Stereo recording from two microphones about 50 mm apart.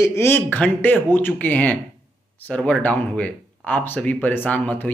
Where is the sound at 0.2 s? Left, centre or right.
Left.